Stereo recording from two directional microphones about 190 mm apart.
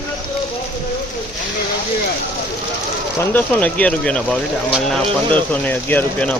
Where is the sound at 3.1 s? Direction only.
10° left (ahead or behind).